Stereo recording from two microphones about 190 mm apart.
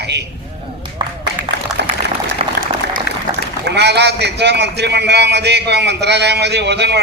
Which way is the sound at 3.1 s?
55° left (ahead or behind).